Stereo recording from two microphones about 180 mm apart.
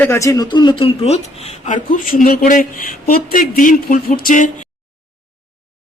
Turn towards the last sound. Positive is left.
turn(degrees=50)  # may be behind; listen again after turning